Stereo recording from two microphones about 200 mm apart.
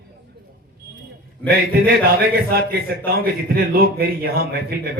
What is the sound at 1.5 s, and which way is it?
A man's voice, 50° right (ahead or behind).